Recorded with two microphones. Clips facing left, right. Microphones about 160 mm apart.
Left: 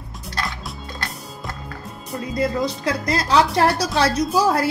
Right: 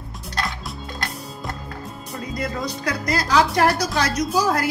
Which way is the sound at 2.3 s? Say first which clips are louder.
Left 6 dB; 25° left (ahead or behind).